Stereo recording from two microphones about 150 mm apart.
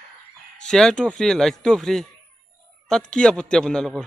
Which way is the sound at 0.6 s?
5° left (ahead or behind).